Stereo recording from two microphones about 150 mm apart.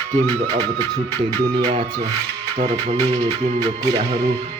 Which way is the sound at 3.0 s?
40° right (ahead or behind).